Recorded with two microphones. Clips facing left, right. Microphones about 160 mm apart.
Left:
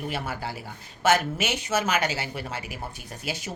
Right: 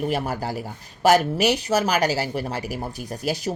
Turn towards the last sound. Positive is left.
turn(degrees=-40)  # may be behind; listen again after turning